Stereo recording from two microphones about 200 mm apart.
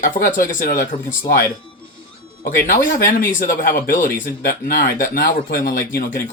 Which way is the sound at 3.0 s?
45° left (ahead or behind).